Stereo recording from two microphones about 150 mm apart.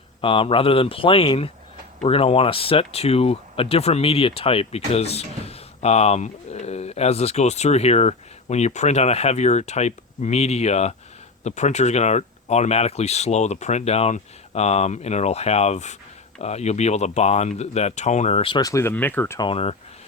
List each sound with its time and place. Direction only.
0.2 s a man's voice: 35° left (ahead or behind)
18.6 s speech: 20° left (ahead or behind)
19.4 s a man's voice: 40° left (ahead or behind)